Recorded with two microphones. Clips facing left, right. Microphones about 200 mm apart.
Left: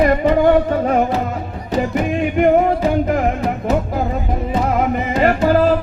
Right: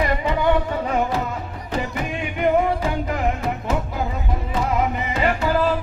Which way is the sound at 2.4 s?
50° left (ahead or behind).